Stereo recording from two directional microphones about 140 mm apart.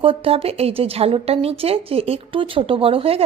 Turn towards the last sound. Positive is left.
turn(degrees=-45)  # may be behind; listen again after turning